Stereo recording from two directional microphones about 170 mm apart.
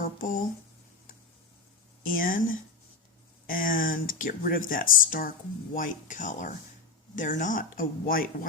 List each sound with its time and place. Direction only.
0.0 s speech: 55° left (ahead or behind)
2.0 s speech: 55° left (ahead or behind)